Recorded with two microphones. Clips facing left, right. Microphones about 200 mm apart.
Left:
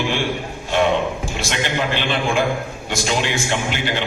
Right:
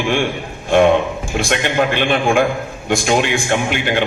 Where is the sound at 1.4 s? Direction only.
55° right (ahead or behind).